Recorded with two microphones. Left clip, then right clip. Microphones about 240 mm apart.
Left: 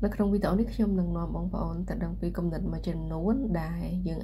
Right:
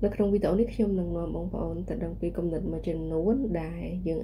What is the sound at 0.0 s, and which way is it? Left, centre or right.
Speech, left.